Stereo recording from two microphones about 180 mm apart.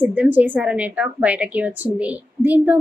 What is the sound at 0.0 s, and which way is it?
A woman's voice, 10° right (ahead or behind).